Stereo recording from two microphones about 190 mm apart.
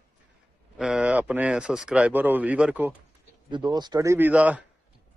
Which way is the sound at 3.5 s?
25° right (ahead or behind).